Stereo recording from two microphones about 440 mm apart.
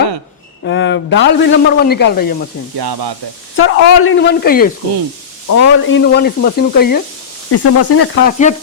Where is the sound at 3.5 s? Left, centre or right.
Left.